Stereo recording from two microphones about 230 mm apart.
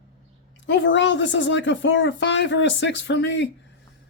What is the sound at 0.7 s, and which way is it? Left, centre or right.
A woman's voice, left.